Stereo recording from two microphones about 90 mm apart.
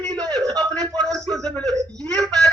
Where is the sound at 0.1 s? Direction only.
50° right (ahead or behind).